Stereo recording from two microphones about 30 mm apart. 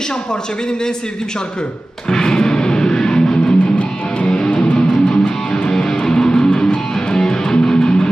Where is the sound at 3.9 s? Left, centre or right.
Left.